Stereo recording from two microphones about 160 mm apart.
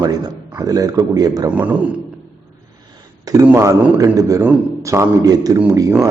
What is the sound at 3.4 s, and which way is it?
A man's voice, 15° right (ahead or behind).